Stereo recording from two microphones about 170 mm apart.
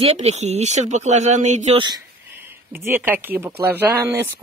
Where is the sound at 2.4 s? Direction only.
15° right (ahead or behind).